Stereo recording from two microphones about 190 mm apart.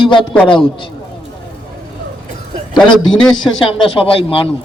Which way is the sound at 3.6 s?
30° left (ahead or behind).